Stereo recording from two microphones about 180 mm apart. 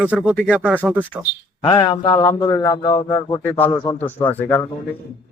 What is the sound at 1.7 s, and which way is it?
A man's voice, 20° left (ahead or behind).